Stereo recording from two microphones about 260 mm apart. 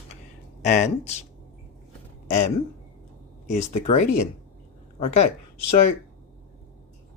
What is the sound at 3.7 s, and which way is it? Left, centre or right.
Speech, left.